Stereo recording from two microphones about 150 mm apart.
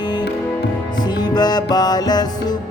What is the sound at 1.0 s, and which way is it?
Music, 25° left (ahead or behind).